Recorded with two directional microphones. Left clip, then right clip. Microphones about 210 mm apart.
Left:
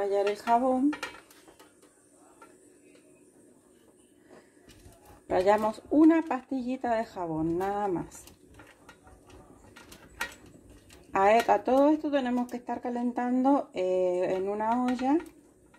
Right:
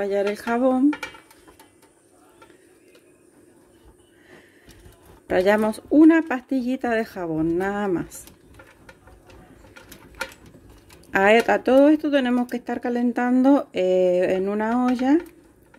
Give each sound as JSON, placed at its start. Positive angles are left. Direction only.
{"t": 0.0, "sound": "speech", "side_deg": -50}
{"t": 5.2, "sound": "speech", "side_deg": -40}
{"t": 11.1, "sound": "speech", "side_deg": -45}